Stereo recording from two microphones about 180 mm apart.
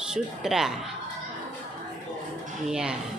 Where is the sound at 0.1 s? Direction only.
Centre (ahead or behind).